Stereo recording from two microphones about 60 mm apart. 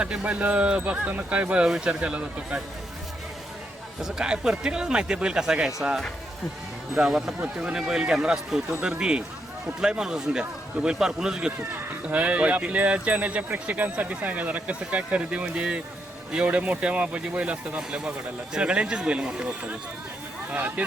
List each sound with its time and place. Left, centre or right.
0.0 s speech: centre
4.0 s speech: centre
12.0 s speech: right
20.5 s speech: right